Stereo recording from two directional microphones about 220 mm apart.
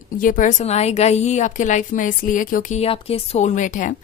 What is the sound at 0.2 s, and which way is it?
A woman's voice, 40° left (ahead or behind).